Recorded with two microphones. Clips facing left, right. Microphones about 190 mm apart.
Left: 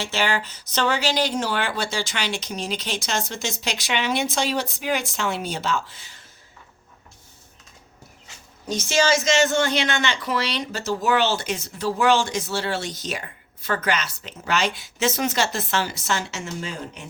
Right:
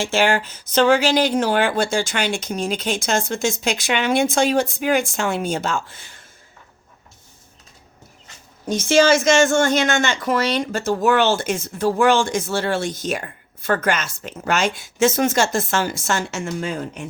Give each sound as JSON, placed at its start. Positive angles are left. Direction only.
{"t": 0.0, "sound": "speech", "side_deg": -50}
{"t": 8.6, "sound": "speech", "side_deg": -55}